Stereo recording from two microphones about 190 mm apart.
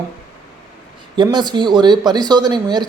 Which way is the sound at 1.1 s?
25° right (ahead or behind).